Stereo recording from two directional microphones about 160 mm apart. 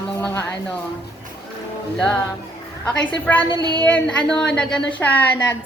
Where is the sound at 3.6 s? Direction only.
25° right (ahead or behind).